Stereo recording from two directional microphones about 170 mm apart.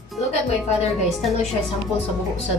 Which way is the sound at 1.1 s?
Centre (ahead or behind).